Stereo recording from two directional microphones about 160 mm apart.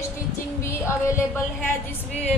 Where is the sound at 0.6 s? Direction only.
15° left (ahead or behind).